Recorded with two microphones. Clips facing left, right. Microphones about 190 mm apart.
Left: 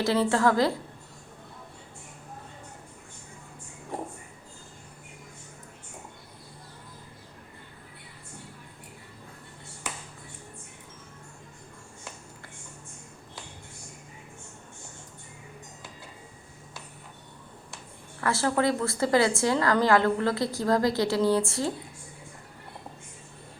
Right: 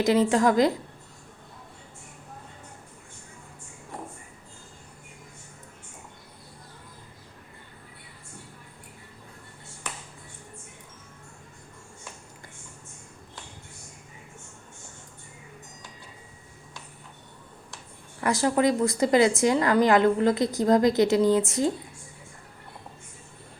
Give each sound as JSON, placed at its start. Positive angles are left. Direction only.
{"t": 0.0, "sound": "a woman's voice", "side_deg": -15}
{"t": 18.2, "sound": "a woman's voice", "side_deg": -15}